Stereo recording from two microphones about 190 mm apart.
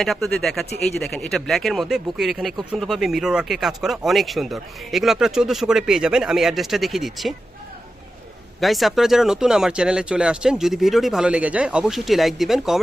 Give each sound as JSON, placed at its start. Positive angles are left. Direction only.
{"t": 0.0, "sound": "speech", "side_deg": 0}
{"t": 8.6, "sound": "speech", "side_deg": 0}